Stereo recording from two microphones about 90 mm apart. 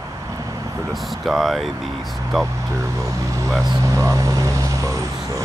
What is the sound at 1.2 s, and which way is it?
Speech, centre (ahead or behind).